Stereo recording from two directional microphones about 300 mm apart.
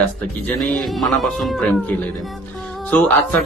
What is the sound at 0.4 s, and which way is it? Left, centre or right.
Speech, centre.